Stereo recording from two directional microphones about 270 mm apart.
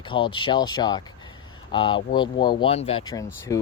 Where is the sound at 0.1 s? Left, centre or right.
Centre.